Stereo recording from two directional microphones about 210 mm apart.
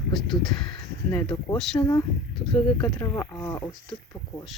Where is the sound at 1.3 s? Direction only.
20° left (ahead or behind).